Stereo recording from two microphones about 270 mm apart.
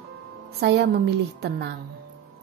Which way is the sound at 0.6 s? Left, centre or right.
Right.